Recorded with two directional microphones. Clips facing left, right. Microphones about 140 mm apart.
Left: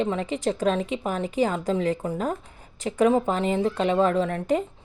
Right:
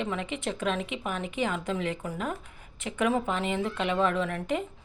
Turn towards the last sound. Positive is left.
turn(degrees=35)  # may be behind; listen again after turning